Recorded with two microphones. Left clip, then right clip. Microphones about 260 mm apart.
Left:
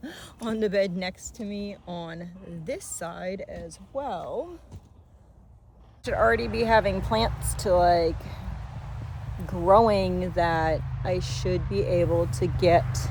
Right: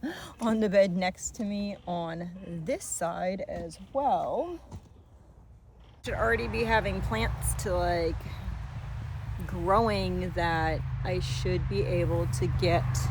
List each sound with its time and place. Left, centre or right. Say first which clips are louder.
0.0 s a woman's voice: right 3 dB; right
6.0 s speech: left 5 dB; centre
9.5 s speech: left 7 dB; centre